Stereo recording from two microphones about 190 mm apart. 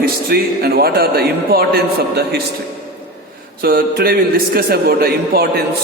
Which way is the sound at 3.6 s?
50° right (ahead or behind).